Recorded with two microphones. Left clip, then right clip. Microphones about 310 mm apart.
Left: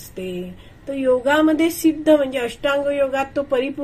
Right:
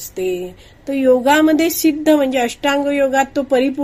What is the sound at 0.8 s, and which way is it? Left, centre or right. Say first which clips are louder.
A woman's voice: right 5 dB; right.